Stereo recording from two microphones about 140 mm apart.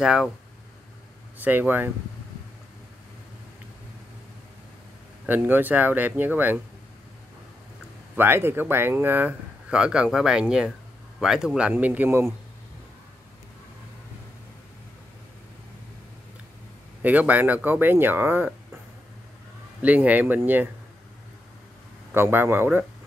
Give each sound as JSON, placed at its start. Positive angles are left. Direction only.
{"t": 0.0, "sound": "speech", "side_deg": -5}
{"t": 1.4, "sound": "speech", "side_deg": -15}
{"t": 5.2, "sound": "speech", "side_deg": -15}
{"t": 8.2, "sound": "speech", "side_deg": -15}
{"t": 17.0, "sound": "speech", "side_deg": -10}
{"t": 19.8, "sound": "speech", "side_deg": -10}
{"t": 22.1, "sound": "speech", "side_deg": -15}